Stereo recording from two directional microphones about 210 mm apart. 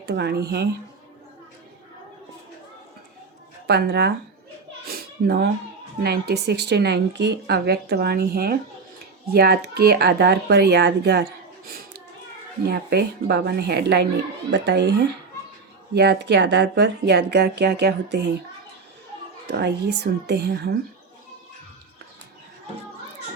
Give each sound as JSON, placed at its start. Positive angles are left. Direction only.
{"t": 0.0, "sound": "speech", "side_deg": -50}
{"t": 3.7, "sound": "speech", "side_deg": -50}
{"t": 4.9, "sound": "a sound", "side_deg": -45}
{"t": 6.0, "sound": "speech", "side_deg": -50}
{"t": 19.5, "sound": "speech", "side_deg": -50}